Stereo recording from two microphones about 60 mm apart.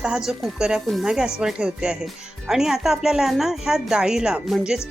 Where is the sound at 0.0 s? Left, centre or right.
Centre.